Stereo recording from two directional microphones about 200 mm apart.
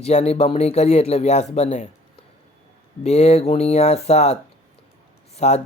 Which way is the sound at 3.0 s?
30° left (ahead or behind).